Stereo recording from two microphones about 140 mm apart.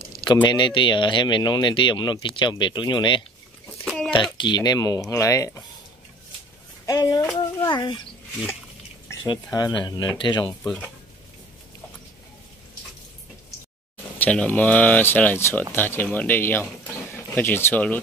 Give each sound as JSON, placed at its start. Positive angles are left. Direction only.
{"t": 0.2, "sound": "speech", "side_deg": 30}
{"t": 3.8, "sound": "a sound", "side_deg": 0}
{"t": 4.4, "sound": "speech", "side_deg": 30}
{"t": 6.9, "sound": "speech", "side_deg": 25}
{"t": 9.3, "sound": "speech", "side_deg": 30}
{"t": 10.6, "sound": "speech", "side_deg": 5}
{"t": 14.1, "sound": "speech", "side_deg": 10}